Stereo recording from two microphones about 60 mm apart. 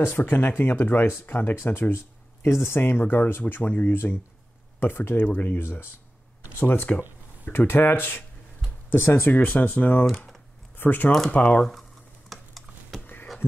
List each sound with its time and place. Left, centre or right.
0.0 s speech: left
6.6 s speech: left
9.3 s speech: left
11.1 s speech: centre
11.3 s speech: left
12.3 s a sound: centre
13.0 s a sound: left